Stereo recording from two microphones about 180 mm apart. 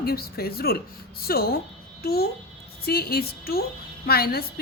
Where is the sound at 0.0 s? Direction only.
55° left (ahead or behind).